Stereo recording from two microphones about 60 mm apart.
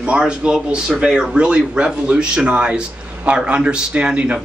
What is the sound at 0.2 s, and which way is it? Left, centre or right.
A man's voice, centre.